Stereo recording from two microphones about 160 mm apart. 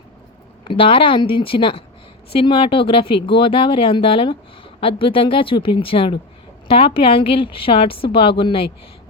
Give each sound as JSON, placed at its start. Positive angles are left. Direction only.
{"t": 0.6, "sound": "speech", "side_deg": 30}